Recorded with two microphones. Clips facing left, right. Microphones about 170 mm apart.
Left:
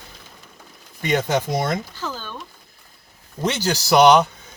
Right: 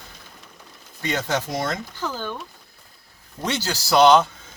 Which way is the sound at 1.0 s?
15° left (ahead or behind).